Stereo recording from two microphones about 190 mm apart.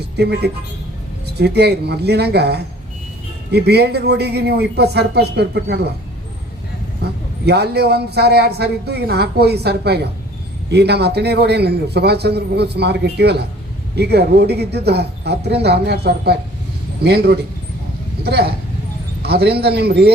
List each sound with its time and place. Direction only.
0.2 s a man's voice: 60° right (ahead or behind)
7.4 s a man's voice: 60° right (ahead or behind)